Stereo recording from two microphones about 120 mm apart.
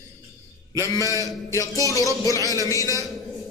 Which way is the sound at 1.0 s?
25° right (ahead or behind).